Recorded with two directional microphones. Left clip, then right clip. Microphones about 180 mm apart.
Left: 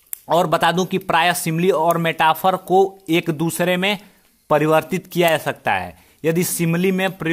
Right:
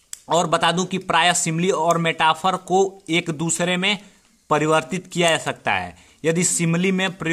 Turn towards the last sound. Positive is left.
turn(degrees=20)  # may be behind; listen again after turning